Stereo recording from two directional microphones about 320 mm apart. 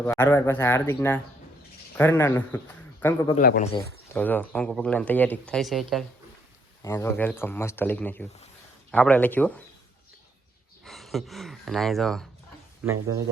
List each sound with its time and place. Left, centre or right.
0.0 s speech: centre
3.3 s speech: left
4.1 s speech: centre
10.8 s speech: centre